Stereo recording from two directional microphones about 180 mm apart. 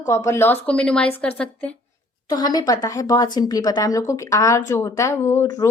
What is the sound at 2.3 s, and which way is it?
Speech, 20° left (ahead or behind).